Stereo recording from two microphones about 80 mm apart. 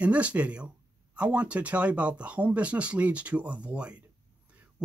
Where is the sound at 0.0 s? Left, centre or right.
Centre.